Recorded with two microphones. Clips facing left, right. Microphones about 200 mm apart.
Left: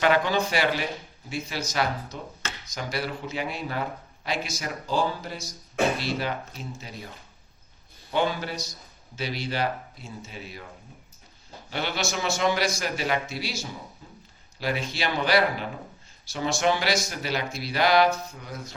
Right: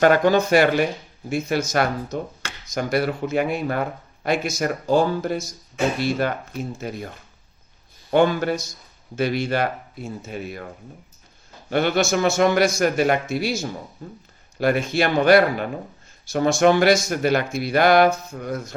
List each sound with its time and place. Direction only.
0.0 s speech: 45° right (ahead or behind)
8.1 s speech: 55° right (ahead or behind)
11.7 s speech: 55° right (ahead or behind)